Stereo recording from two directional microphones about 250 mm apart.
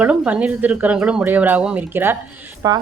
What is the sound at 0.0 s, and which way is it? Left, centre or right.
A woman's voice, centre.